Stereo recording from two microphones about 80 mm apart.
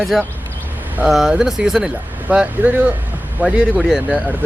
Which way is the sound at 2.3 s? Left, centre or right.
Centre.